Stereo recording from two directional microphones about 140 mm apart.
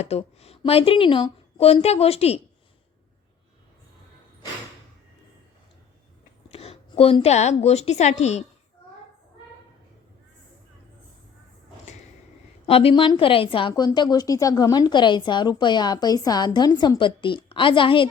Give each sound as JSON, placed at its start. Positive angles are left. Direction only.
{"t": 0.0, "sound": "a woman's voice", "side_deg": 50}
{"t": 6.5, "sound": "a woman's voice", "side_deg": 45}
{"t": 12.6, "sound": "a woman's voice", "side_deg": 45}